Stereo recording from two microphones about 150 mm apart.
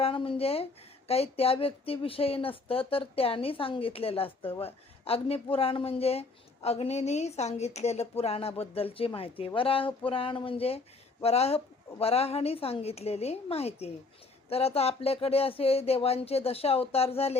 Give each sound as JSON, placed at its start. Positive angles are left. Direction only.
{"t": 0.0, "sound": "speech", "side_deg": 35}